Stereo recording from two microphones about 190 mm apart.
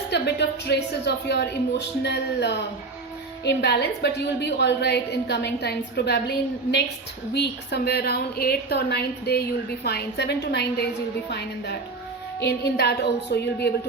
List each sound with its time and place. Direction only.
0.1 s a woman's voice: 65° left (ahead or behind)